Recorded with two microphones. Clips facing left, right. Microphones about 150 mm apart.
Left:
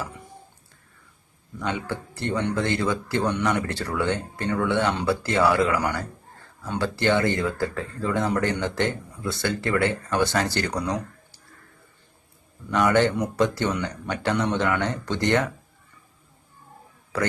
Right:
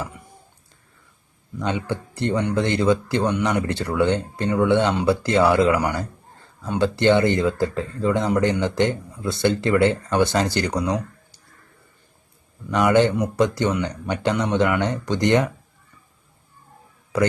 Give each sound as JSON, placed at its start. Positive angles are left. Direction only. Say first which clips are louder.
{"t": 1.5, "sound": "speech", "louder": "right 4 dB", "side_deg": -20}
{"t": 12.7, "sound": "speech", "louder": "right 3 dB", "side_deg": -20}